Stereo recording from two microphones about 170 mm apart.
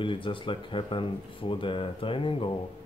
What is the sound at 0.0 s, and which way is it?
Speech, 30° left (ahead or behind).